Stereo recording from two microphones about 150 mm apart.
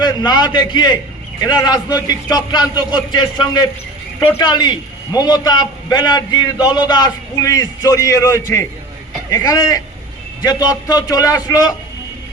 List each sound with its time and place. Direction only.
0.0 s a man's voice: 25° left (ahead or behind)